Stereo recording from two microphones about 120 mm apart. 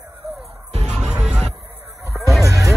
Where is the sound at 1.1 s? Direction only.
5° right (ahead or behind).